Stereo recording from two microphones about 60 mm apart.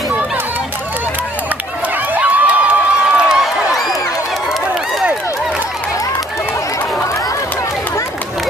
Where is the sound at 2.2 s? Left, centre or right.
Right.